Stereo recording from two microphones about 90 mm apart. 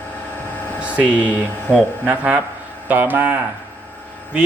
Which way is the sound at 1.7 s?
15° right (ahead or behind).